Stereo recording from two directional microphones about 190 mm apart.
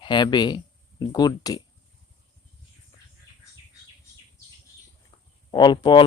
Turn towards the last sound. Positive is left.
turn(degrees=25)  # may be behind; listen again after turning